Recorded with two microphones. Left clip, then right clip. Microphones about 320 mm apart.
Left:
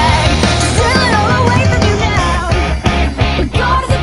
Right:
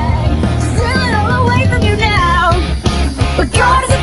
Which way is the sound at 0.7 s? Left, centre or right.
Left.